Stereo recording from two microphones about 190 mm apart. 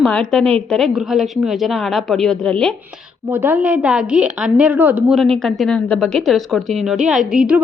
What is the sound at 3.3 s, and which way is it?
A woman's voice, 10° right (ahead or behind).